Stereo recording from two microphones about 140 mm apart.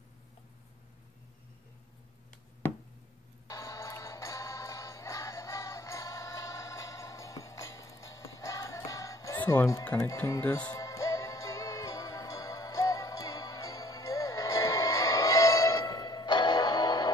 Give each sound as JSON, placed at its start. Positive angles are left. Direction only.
{"t": 3.4, "sound": "music", "side_deg": 20}
{"t": 9.4, "sound": "speech", "side_deg": 15}
{"t": 10.7, "sound": "music", "side_deg": 20}